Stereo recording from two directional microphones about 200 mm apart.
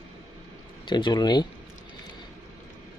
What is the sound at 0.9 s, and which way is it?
Speech, 20° left (ahead or behind).